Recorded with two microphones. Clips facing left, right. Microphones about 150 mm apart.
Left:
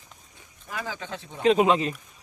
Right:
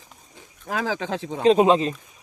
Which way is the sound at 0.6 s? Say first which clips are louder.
Right 8 dB; 90° right.